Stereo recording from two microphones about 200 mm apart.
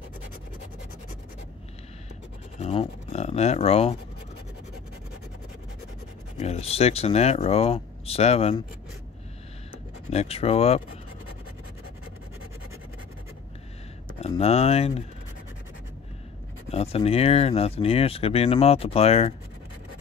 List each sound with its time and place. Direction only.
2.6 s speech: 30° left (ahead or behind)
6.4 s speech: 30° left (ahead or behind)
10.1 s speech: 30° left (ahead or behind)
14.4 s speech: 30° left (ahead or behind)
16.7 s speech: 30° left (ahead or behind)